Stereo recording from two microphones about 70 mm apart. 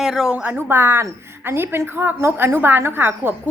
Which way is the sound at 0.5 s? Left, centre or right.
Right.